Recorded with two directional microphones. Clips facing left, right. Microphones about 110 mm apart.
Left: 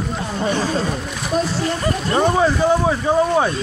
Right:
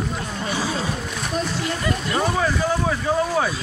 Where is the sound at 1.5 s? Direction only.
35° left (ahead or behind).